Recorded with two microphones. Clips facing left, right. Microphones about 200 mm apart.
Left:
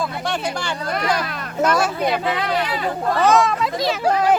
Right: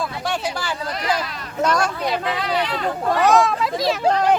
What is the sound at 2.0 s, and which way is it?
Speech, 50° left (ahead or behind).